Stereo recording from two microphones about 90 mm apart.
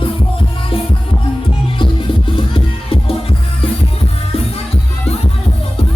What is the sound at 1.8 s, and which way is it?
Music, 70° left (ahead or behind).